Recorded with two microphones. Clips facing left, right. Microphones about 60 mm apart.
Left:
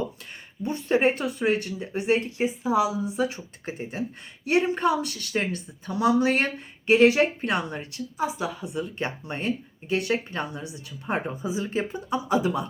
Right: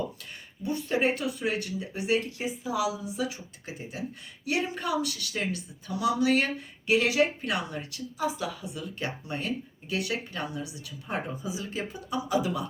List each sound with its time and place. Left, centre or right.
0.6 s speech: left